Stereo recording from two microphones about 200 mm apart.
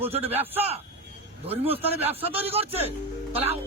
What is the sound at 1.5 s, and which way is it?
A man's voice, 30° right (ahead or behind).